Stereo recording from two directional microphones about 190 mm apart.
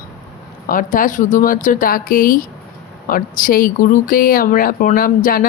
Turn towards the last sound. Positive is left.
turn(degrees=50)  # may be behind; listen again after turning